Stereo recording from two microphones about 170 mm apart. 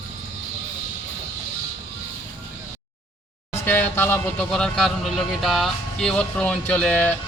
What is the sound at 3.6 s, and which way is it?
Speech, 10° left (ahead or behind).